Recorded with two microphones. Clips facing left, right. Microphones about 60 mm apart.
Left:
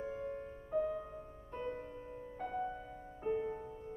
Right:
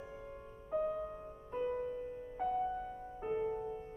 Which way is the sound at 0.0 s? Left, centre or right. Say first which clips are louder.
Left 7 dB; left.